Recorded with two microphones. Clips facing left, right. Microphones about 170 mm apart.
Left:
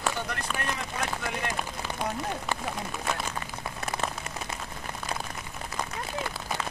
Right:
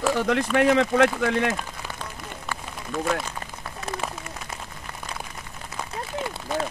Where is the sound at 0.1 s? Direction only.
90° right.